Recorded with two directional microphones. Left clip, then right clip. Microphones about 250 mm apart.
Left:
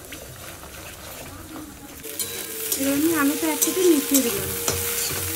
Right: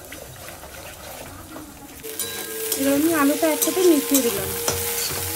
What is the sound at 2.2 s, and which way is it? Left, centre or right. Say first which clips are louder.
Stir: right 2 dB; centre.